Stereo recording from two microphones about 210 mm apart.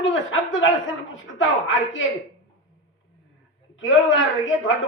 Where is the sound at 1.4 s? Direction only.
65° left (ahead or behind).